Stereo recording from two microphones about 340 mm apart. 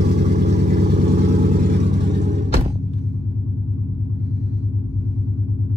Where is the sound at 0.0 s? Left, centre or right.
Right.